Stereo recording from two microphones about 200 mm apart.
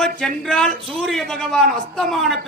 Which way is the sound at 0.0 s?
5° left (ahead or behind).